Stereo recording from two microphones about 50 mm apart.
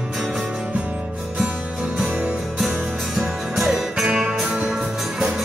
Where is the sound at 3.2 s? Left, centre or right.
Centre.